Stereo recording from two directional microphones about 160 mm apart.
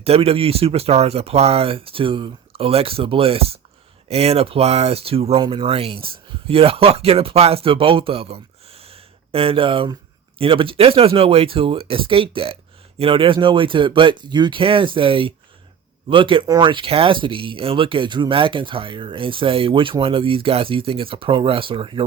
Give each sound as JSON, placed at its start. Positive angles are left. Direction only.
{"t": 0.0, "sound": "speech", "side_deg": -40}